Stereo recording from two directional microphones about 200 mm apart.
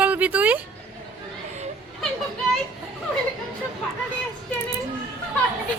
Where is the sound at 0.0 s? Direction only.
5° right (ahead or behind).